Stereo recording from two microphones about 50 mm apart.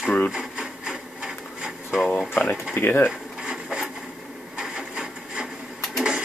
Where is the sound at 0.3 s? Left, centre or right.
Centre.